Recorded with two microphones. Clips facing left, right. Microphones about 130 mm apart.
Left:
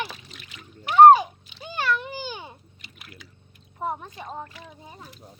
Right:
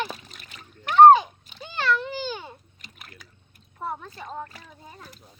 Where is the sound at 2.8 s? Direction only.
45° right (ahead or behind).